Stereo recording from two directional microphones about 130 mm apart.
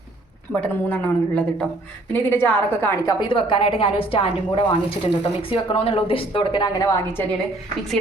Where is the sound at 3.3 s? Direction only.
40° left (ahead or behind).